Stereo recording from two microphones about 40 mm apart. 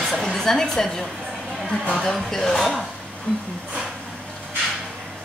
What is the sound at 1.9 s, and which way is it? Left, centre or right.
Speech, centre.